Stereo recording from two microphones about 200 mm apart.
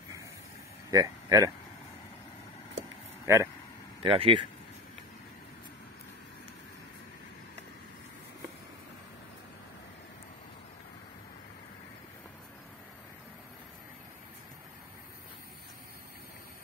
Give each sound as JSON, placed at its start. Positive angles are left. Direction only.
{"t": 0.8, "sound": "speech", "side_deg": -15}
{"t": 3.3, "sound": "speech", "side_deg": -15}
{"t": 4.0, "sound": "speech", "side_deg": -25}